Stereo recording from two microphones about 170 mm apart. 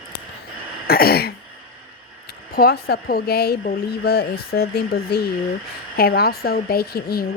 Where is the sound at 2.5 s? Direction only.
70° left (ahead or behind).